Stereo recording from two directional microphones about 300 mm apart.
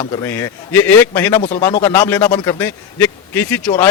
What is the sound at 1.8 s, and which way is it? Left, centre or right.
Speech, centre.